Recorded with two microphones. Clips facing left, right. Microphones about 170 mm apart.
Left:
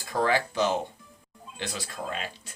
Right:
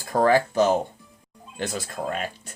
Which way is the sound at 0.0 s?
50° right (ahead or behind).